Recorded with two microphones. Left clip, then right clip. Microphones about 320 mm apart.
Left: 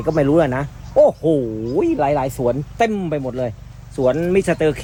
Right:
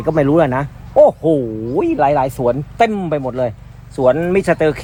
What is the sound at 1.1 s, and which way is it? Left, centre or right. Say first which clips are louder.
Speech: right 3 dB; right.